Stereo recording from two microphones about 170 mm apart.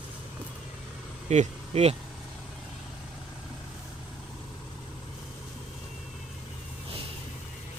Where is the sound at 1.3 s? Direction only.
40° right (ahead or behind).